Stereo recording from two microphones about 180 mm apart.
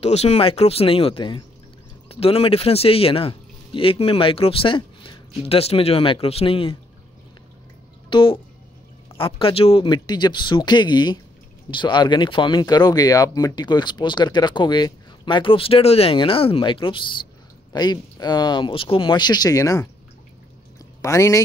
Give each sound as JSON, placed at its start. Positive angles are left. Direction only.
{"t": 0.0, "sound": "speech", "side_deg": 35}
{"t": 8.1, "sound": "speech", "side_deg": 30}
{"t": 21.0, "sound": "speech", "side_deg": 15}